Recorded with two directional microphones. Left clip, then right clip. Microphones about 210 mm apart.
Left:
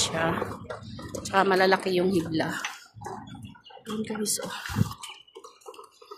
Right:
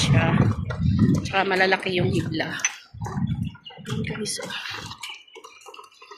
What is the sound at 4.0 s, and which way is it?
Speech, 15° left (ahead or behind).